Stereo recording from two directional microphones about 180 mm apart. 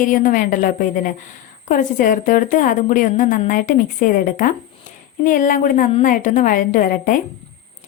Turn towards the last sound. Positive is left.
turn(degrees=50)  # may be behind; listen again after turning